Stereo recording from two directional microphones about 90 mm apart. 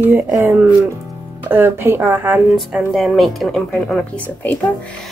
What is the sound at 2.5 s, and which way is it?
Speech, 5° right (ahead or behind).